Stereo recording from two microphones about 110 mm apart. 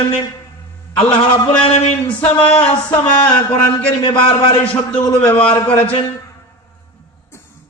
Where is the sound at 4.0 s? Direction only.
50° left (ahead or behind).